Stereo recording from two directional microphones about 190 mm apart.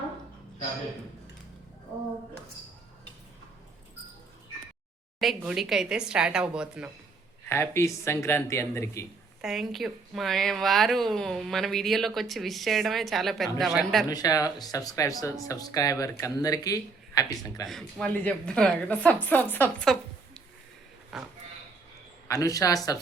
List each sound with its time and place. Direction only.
5.4 s speech: 5° right (ahead or behind)
7.4 s speech: 10° left (ahead or behind)
9.4 s speech: centre (ahead or behind)
14.1 s speech: 20° left (ahead or behind)
17.7 s speech: centre (ahead or behind)
19.8 s a sound: centre (ahead or behind)
21.1 s speech: centre (ahead or behind)
22.3 s speech: 20° left (ahead or behind)